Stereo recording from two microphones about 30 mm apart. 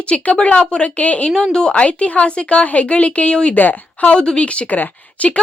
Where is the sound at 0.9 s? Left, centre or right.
Left.